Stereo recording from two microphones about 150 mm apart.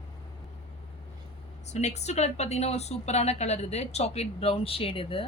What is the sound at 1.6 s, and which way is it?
A woman's voice, 50° left (ahead or behind).